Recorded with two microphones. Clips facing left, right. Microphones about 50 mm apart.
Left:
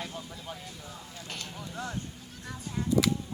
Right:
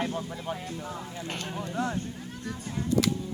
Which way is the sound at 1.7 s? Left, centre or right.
Right.